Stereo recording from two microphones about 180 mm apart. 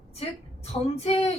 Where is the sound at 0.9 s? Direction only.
35° left (ahead or behind).